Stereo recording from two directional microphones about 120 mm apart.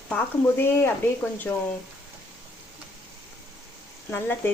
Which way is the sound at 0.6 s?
20° left (ahead or behind).